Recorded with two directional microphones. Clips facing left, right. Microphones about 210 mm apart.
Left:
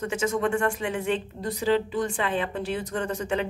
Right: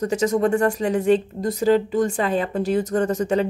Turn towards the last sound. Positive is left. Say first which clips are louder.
# right 7 dB
turn(degrees=-40)  # may be behind; listen again after turning